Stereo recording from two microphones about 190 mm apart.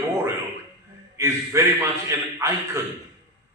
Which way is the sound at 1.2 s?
15° right (ahead or behind).